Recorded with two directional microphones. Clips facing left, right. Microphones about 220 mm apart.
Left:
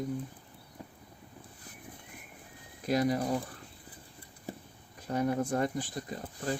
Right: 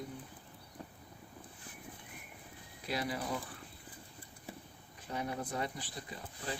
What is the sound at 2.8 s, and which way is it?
Speech, 45° left (ahead or behind).